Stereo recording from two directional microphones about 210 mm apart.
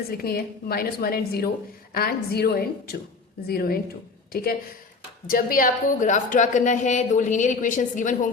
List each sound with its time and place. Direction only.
0.1 s a woman's voice: 45° left (ahead or behind)